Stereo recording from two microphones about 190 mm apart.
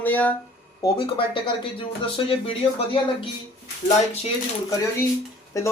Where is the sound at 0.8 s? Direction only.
25° left (ahead or behind).